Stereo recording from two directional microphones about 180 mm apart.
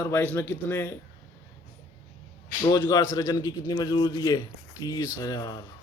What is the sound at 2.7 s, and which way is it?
A man's voice, 20° left (ahead or behind).